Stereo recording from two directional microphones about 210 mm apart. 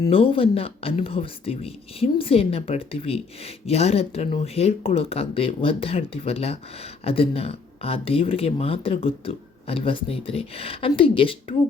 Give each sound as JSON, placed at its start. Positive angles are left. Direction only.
{"t": 0.1, "sound": "speech", "side_deg": 25}